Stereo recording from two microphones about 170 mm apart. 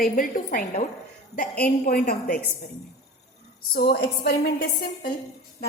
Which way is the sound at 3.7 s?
65° left (ahead or behind).